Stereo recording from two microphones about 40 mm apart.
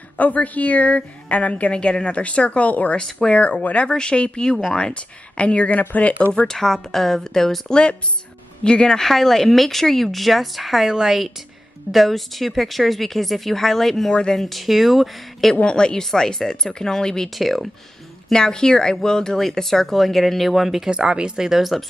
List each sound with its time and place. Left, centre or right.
0.2 s a woman's voice: left
1.7 s speech: left
3.1 s speech: centre
3.3 s a woman's voice: left
6.4 s speech: centre
8.6 s speech: left; by 15.5 s centre
15.6 s speech: centre
17.3 s speech: centre
18.3 s speech: centre
20.9 s speech: right